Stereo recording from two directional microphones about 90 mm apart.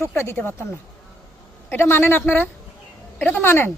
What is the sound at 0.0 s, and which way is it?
Speech, 25° left (ahead or behind).